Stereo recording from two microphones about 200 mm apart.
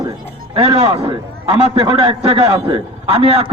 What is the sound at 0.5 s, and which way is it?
Speech, 25° right (ahead or behind).